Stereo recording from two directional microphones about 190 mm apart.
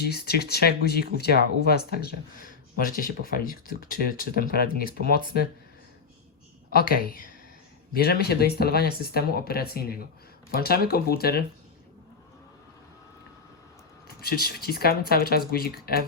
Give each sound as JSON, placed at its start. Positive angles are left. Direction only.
{"t": 0.0, "sound": "speech", "side_deg": 55}
{"t": 6.7, "sound": "speech", "side_deg": 50}
{"t": 14.2, "sound": "speech", "side_deg": 55}